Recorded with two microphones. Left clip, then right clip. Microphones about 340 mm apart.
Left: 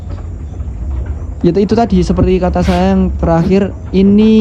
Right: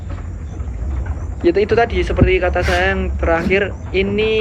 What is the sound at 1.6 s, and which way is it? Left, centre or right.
Speech, centre.